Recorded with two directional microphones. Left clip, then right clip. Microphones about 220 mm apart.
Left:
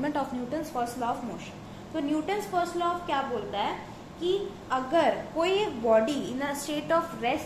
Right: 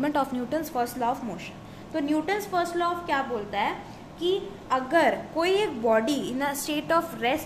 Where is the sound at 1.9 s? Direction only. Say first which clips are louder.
Right 3 dB; 45° right (ahead or behind).